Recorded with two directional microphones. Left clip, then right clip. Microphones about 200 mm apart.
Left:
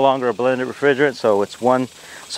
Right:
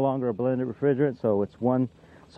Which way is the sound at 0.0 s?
15° left (ahead or behind).